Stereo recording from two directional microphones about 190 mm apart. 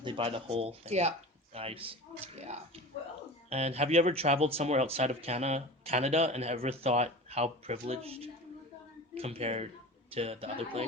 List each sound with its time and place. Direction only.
0.0 s speech: 30° right (ahead or behind)